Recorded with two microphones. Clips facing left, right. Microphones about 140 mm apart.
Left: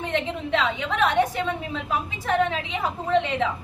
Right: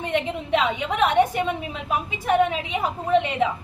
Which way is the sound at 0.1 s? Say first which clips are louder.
Right 3 dB; 15° right (ahead or behind).